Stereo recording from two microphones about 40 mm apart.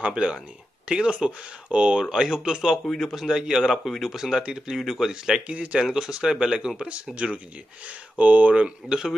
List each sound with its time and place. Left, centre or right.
0.1 s speech: right
2.8 s speech: centre
3.2 s speech: centre
5.5 s speech: right
5.9 s speech: centre
6.9 s speech: right
7.8 s speech: right
8.6 s speech: centre